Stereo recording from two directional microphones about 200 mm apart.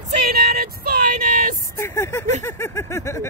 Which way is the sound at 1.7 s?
10° left (ahead or behind).